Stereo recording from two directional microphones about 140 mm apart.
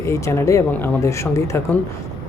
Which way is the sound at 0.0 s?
20° left (ahead or behind).